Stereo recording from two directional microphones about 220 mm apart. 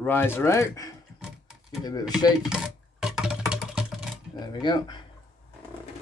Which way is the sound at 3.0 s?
5° right (ahead or behind).